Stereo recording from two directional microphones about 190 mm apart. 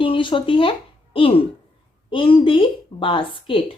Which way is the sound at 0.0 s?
25° left (ahead or behind).